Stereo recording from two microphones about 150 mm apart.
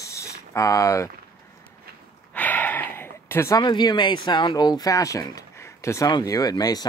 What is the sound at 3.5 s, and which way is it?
Speech, 30° left (ahead or behind).